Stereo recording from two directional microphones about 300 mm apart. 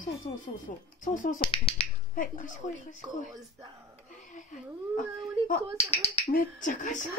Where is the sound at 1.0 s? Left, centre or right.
Left.